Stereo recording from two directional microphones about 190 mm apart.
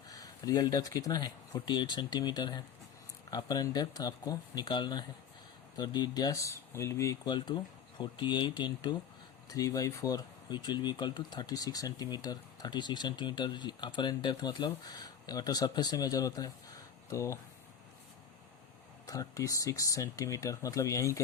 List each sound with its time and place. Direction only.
0.1 s speech: 20° left (ahead or behind)
19.0 s speech: 15° left (ahead or behind)